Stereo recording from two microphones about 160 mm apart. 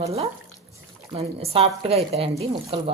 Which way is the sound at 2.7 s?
35° right (ahead or behind).